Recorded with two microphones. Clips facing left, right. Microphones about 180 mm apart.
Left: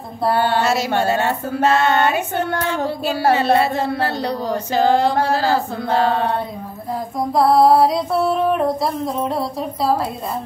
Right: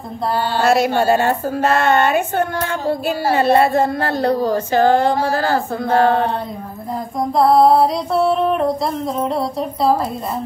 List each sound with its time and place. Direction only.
0.3 s mantra: 60° left (ahead or behind)
0.6 s speech: 55° right (ahead or behind)
7.2 s female singing: centre (ahead or behind)